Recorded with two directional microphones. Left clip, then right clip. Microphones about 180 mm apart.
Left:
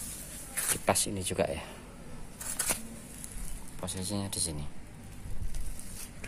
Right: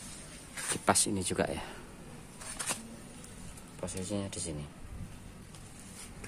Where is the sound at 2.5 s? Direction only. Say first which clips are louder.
Left 3 dB; 55° left (ahead or behind).